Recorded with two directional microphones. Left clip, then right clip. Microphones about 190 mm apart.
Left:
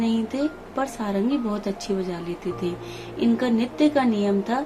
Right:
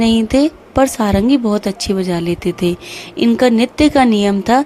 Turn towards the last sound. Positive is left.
turn(degrees=-55)  # may be behind; listen again after turning